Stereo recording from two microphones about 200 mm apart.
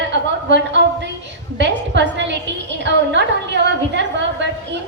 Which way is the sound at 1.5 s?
60° right (ahead or behind).